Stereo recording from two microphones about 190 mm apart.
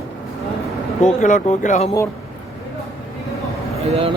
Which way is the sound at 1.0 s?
40° left (ahead or behind).